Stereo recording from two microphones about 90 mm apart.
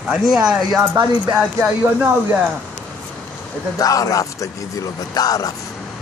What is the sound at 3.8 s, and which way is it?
Speech, 40° left (ahead or behind).